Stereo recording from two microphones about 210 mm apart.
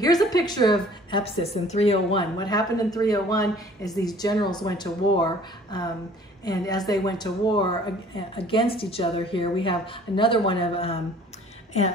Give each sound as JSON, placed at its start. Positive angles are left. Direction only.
{"t": 0.0, "sound": "a woman's voice", "side_deg": 20}